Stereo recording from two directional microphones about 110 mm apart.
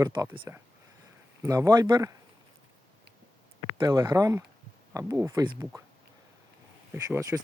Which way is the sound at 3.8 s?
40° right (ahead or behind).